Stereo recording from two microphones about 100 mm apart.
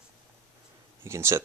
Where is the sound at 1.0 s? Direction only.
25° right (ahead or behind).